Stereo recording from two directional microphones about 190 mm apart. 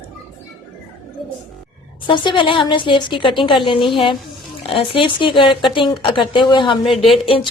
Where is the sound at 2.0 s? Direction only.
25° left (ahead or behind).